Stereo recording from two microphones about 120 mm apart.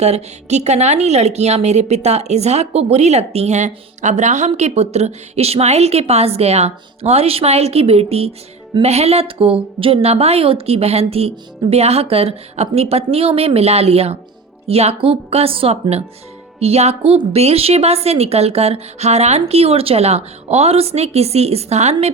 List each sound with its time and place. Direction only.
0.0 s a woman's voice: 65° right (ahead or behind)